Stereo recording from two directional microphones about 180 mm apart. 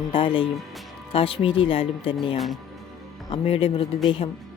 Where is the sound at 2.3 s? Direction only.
Centre (ahead or behind).